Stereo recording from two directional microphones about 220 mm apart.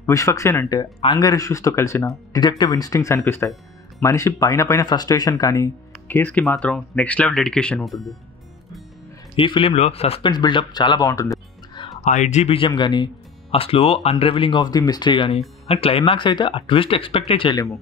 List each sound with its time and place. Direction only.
0.0 s speech: 15° left (ahead or behind)
9.4 s speech: 25° left (ahead or behind)
12.0 s speech: 35° left (ahead or behind)